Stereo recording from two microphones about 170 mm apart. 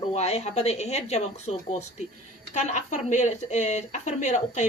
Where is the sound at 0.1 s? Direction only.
40° left (ahead or behind).